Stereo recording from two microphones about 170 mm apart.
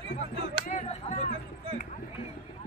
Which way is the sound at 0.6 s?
45° left (ahead or behind).